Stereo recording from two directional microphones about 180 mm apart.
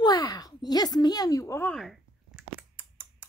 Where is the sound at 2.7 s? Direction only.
10° right (ahead or behind).